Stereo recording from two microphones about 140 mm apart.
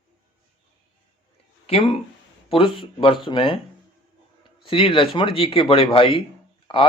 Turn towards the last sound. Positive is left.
turn(degrees=40)  # may be behind; listen again after turning